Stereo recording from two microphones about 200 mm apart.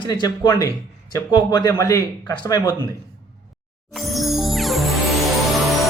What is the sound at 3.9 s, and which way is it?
Music, centre (ahead or behind).